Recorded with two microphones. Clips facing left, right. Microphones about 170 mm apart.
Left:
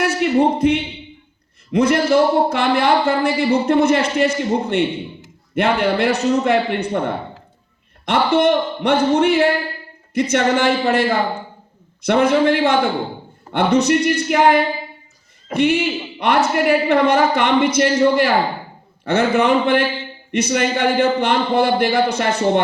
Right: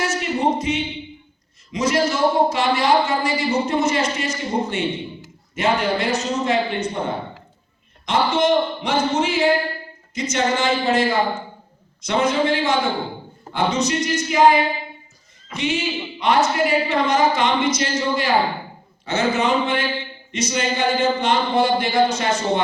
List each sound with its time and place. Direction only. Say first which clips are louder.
0.0 s speech: left 5 dB; 60° left (ahead or behind)
12.0 s a man's voice: left 5 dB; 60° left (ahead or behind)